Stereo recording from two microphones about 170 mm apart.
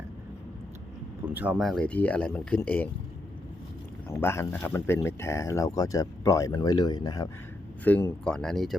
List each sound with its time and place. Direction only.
1.2 s speech: 10° right (ahead or behind); by 2.9 s 10° left (ahead or behind)
4.1 s speech: 15° left (ahead or behind)
7.9 s speech: 10° left (ahead or behind)